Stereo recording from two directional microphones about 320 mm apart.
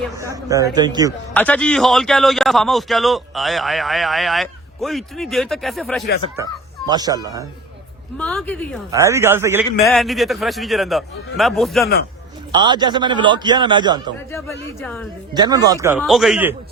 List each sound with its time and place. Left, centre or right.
0.2 s a man's voice: centre
1.3 s a man's voice: centre
6.3 s a child's voice: centre
8.2 s a man's voice: centre
9.6 s speech: centre
9.9 s a man's voice: centre
12.6 s a man's voice: centre
14.3 s speech: centre
15.3 s a man's voice: centre